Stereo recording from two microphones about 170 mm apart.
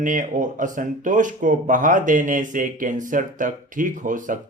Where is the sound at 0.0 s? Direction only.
50° right (ahead or behind).